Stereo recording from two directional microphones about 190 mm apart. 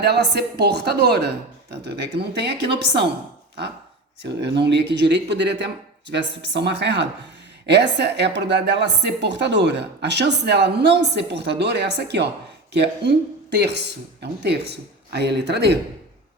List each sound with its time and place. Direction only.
0.0 s a woman's voice: 60° right (ahead or behind)
4.2 s a woman's voice: 65° right (ahead or behind)